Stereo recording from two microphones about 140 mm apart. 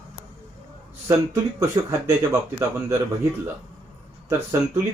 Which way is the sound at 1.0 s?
20° right (ahead or behind).